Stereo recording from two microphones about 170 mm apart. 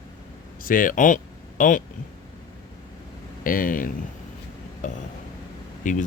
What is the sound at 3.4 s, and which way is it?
Speech, 55° left (ahead or behind).